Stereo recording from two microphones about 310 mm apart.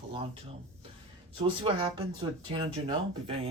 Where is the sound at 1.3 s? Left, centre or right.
Centre.